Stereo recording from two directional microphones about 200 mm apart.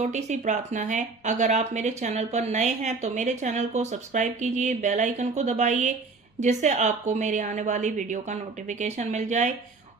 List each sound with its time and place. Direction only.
0.0 s speech: 35° right (ahead or behind)